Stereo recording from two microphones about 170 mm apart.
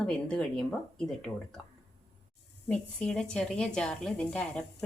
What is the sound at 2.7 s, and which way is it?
A woman's voice, 5° left (ahead or behind).